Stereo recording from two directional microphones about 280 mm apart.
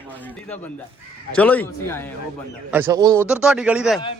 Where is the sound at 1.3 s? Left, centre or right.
Centre.